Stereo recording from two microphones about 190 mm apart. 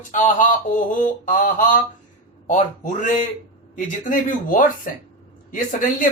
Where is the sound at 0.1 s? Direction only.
40° left (ahead or behind).